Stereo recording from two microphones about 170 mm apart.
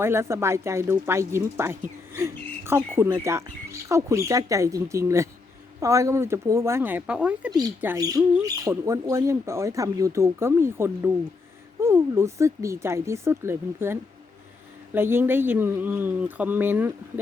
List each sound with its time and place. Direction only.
0.0 s speech: 15° right (ahead or behind)